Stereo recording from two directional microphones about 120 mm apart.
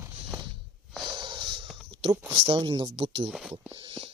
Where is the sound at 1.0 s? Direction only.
40° right (ahead or behind).